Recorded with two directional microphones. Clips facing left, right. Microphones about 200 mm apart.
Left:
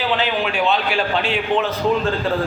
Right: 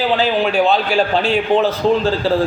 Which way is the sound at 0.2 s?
40° right (ahead or behind).